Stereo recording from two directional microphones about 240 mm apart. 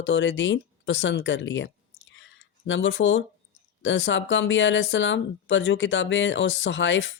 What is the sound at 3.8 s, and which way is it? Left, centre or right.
Speech, left.